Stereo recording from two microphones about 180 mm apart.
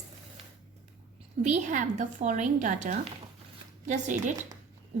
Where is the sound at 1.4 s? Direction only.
45° right (ahead or behind).